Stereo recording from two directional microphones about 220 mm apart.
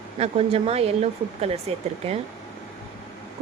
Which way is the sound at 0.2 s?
30° right (ahead or behind).